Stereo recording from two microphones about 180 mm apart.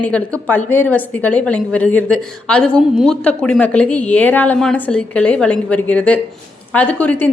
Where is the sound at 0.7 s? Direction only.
10° left (ahead or behind).